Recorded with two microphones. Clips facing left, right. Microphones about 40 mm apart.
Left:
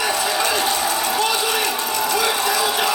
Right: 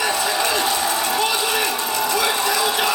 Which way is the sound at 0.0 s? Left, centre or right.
Centre.